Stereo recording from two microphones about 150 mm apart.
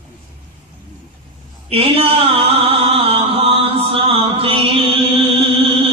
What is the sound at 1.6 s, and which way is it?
Mantra, 40° right (ahead or behind).